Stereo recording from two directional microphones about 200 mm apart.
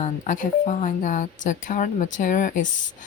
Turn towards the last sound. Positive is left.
turn(degrees=40)  # may be behind; listen again after turning